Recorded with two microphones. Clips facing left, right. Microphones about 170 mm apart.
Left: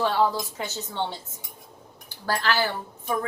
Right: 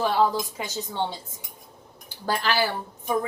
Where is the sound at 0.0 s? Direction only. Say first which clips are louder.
Right 1 dB; 10° right (ahead or behind).